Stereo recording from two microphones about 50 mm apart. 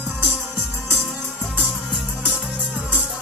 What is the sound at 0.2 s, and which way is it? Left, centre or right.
Music, right.